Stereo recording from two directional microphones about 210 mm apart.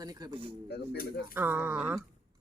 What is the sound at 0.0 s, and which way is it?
Speech, 15° right (ahead or behind).